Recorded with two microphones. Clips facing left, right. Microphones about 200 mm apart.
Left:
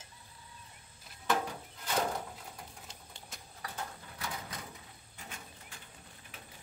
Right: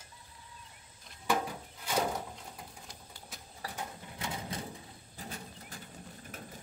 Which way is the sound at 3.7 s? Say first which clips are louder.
Even; 15° right (ahead or behind).